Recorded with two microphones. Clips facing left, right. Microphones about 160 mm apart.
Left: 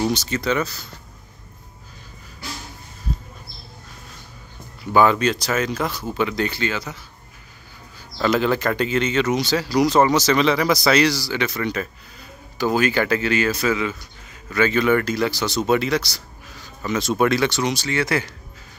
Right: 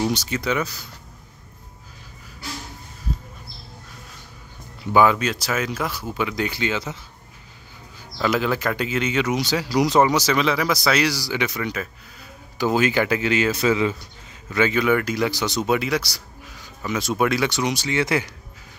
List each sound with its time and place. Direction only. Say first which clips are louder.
0.1 s speech: left 2 dB; 10° right (ahead or behind)
4.9 s speech: left 1 dB; 5° right (ahead or behind); by 7.0 s 20° right (ahead or behind)
8.2 s speech: left 2 dB; 5° right (ahead or behind)
12.5 s speech: even; 20° right (ahead or behind)
14.5 s speech: left 1 dB; 15° right (ahead or behind)